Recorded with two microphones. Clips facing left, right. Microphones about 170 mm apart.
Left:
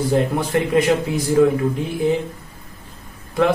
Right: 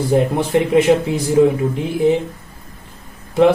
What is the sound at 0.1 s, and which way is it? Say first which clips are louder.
Speech: right 6 dB; 25° right (ahead or behind).